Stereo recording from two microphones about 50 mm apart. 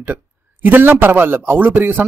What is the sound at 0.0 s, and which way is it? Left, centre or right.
Speech, right.